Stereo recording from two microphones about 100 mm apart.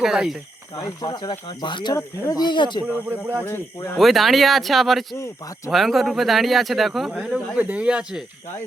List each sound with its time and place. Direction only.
0.0 s speech: 5° right (ahead or behind)
1.0 s speech: 50° left (ahead or behind)
2.8 s speech: 25° right (ahead or behind)
3.4 s speech: 25° left (ahead or behind)
3.9 s speech: centre (ahead or behind)
5.1 s speech: 25° left (ahead or behind)
5.7 s speech: centre (ahead or behind)
7.5 s speech: 15° right (ahead or behind)